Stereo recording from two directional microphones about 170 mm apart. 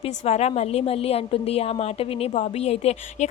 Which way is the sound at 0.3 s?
40° left (ahead or behind).